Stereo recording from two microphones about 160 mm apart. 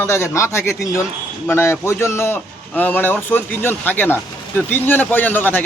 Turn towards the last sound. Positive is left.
turn(degrees=10)  # may be behind; listen again after turning